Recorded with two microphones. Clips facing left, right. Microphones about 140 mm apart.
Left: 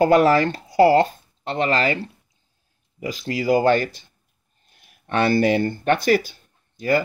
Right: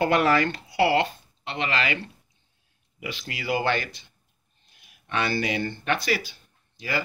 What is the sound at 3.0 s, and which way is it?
Speech, 40° left (ahead or behind).